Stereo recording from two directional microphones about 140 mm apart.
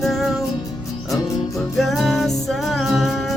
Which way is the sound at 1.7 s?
Centre (ahead or behind).